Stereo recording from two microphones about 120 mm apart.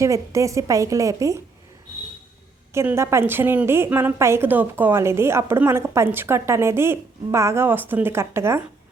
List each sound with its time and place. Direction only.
0.0 s a woman's voice: 25° right (ahead or behind)
2.7 s a woman's voice: 20° right (ahead or behind)